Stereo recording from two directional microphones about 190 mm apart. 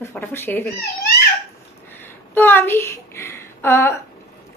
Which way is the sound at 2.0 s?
10° left (ahead or behind).